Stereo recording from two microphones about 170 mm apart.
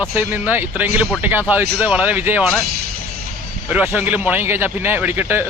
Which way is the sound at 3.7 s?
10° right (ahead or behind).